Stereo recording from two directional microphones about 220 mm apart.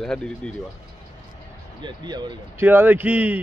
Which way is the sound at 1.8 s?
20° right (ahead or behind).